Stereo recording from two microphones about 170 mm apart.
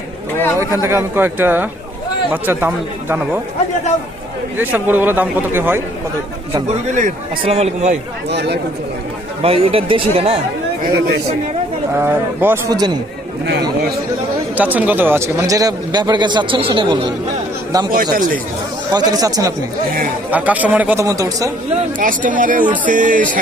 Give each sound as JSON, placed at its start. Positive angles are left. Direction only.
{"t": 0.6, "sound": "speech", "side_deg": -15}
{"t": 4.5, "sound": "speech", "side_deg": -10}
{"t": 6.7, "sound": "speech", "side_deg": -45}
{"t": 7.4, "sound": "speech", "side_deg": -35}
{"t": 8.3, "sound": "speech", "side_deg": -80}
{"t": 9.4, "sound": "speech", "side_deg": -35}
{"t": 11.9, "sound": "speech", "side_deg": -10}
{"t": 12.7, "sound": "speech", "side_deg": -25}
{"t": 13.4, "sound": "a man's voice", "side_deg": -75}
{"t": 14.5, "sound": "speech", "side_deg": -10}
{"t": 17.9, "sound": "speech", "side_deg": -55}
{"t": 18.9, "sound": "speech", "side_deg": -20}
{"t": 20.3, "sound": "speech", "side_deg": -10}
{"t": 21.9, "sound": "speech", "side_deg": -50}